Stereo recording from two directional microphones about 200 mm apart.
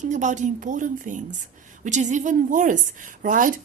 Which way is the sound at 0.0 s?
35° right (ahead or behind).